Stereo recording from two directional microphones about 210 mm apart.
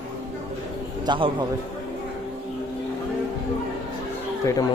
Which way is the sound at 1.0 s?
25° right (ahead or behind).